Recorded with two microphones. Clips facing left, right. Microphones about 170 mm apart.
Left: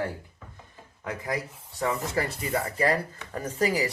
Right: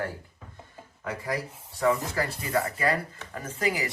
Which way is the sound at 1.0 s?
20° left (ahead or behind).